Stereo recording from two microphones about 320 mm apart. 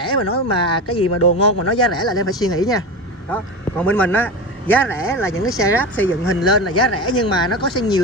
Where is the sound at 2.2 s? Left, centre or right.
Centre.